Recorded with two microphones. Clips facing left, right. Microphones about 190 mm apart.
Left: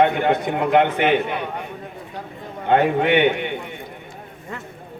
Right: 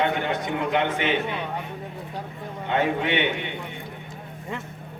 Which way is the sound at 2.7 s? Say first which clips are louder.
Left 7 dB; 55° left (ahead or behind).